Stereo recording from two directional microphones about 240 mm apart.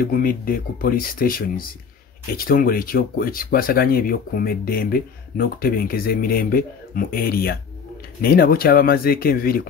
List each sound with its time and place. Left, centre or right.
0.0 s speech: left